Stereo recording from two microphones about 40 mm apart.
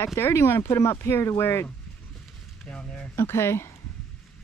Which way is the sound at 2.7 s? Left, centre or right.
Left.